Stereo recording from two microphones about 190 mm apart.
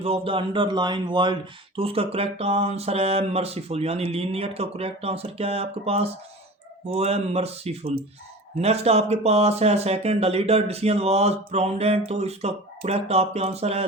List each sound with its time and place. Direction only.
0.0 s speech: 30° right (ahead or behind)